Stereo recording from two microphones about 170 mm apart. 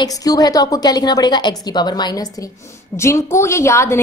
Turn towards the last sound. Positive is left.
turn(degrees=15)  # may be behind; listen again after turning